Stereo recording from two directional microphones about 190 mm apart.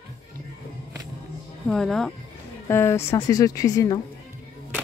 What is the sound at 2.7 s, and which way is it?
Speech, 15° left (ahead or behind).